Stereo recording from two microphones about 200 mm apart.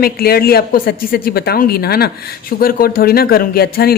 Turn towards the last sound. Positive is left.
turn(degrees=50)  # may be behind; listen again after turning